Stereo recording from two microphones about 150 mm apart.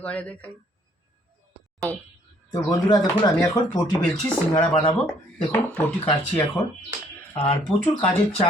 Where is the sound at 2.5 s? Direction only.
30° left (ahead or behind).